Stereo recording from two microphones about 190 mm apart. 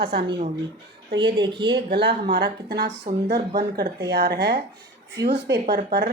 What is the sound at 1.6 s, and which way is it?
A woman's voice, 55° right (ahead or behind).